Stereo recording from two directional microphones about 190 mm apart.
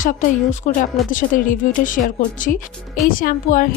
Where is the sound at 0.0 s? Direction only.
45° left (ahead or behind).